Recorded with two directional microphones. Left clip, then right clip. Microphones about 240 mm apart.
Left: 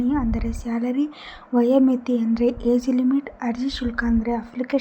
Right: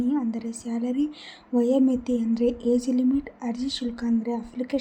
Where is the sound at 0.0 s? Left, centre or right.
Centre.